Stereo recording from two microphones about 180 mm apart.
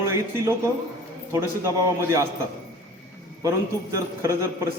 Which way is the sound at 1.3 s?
15° right (ahead or behind).